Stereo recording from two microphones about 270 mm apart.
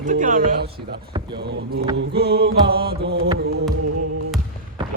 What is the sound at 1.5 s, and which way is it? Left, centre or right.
Mantra, right.